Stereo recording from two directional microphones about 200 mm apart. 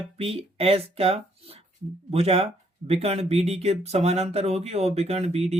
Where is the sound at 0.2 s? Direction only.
30° right (ahead or behind).